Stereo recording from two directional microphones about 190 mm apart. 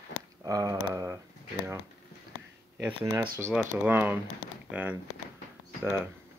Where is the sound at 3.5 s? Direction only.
10° right (ahead or behind).